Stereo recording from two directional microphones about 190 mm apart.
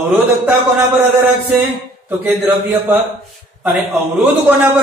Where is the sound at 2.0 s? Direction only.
10° right (ahead or behind).